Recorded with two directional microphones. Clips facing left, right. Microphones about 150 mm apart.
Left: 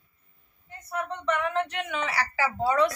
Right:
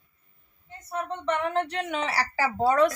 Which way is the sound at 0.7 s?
25° right (ahead or behind).